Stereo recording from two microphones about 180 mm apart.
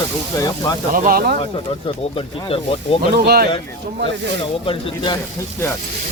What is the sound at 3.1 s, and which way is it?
Speech, 60° right (ahead or behind).